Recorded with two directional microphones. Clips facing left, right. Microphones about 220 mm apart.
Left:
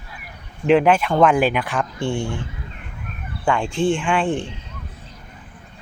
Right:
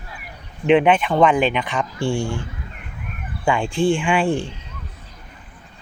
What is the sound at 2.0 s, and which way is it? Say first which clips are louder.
Speech: right 3 dB; 20° left (ahead or behind).